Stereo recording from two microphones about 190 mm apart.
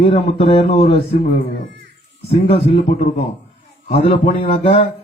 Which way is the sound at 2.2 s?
30° left (ahead or behind).